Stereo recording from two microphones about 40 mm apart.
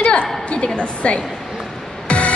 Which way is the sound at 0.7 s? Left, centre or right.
Left.